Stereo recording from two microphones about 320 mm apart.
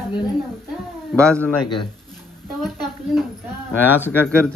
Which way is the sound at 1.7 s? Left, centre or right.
Centre.